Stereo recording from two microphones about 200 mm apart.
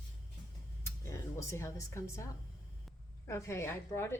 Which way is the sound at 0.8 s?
15° left (ahead or behind).